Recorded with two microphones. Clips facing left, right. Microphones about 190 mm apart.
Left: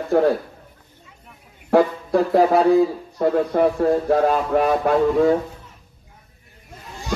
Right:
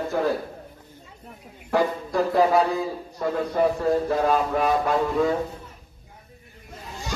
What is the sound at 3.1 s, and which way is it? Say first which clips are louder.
Speech: left 5 dB; 50° left (ahead or behind).